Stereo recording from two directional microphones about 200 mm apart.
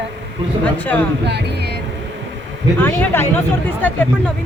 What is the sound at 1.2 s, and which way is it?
Speech, 55° right (ahead or behind).